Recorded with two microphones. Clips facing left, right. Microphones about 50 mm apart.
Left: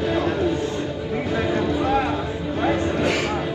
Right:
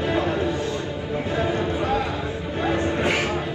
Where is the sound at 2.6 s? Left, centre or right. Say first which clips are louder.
Left 1 dB; right.